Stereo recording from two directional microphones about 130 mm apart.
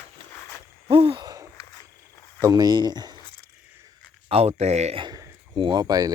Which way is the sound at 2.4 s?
30° right (ahead or behind).